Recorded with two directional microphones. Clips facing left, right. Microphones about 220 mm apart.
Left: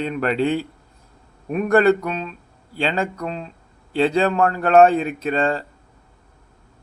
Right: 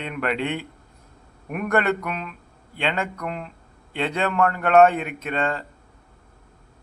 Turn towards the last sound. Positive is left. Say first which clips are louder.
# left 5 dB
turn(degrees=30)  # may be behind; listen again after turning